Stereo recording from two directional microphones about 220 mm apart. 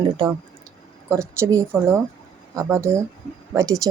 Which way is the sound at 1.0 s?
10° right (ahead or behind).